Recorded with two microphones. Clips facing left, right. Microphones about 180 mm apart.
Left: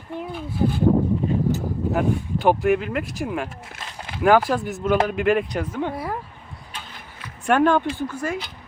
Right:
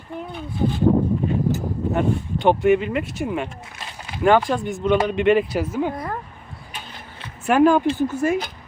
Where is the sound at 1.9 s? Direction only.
5° left (ahead or behind).